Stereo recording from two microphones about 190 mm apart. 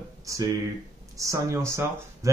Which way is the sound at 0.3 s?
15° right (ahead or behind).